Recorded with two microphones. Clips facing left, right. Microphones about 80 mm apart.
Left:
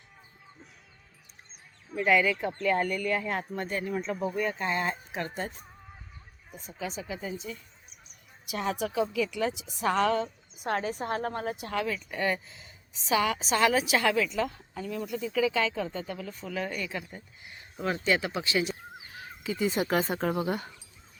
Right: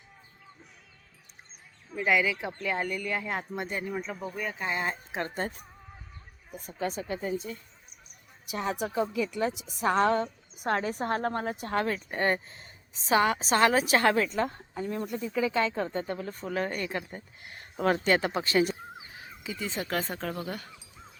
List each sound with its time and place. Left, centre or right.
2.0 s speech: centre
6.6 s speech: right
8.8 s a woman's voice: right
19.5 s speech: centre